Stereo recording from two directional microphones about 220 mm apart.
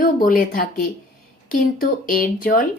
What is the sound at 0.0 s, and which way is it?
Speech, 40° left (ahead or behind).